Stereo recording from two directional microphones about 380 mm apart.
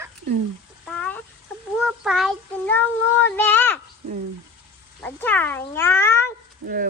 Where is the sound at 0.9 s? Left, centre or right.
Centre.